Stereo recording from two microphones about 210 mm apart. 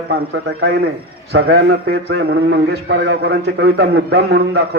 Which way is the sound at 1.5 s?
50° right (ahead or behind).